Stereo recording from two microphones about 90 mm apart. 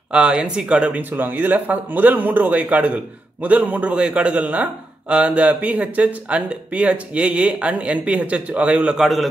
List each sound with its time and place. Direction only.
0.1 s speech: 10° right (ahead or behind)
9.0 s a man's voice: centre (ahead or behind)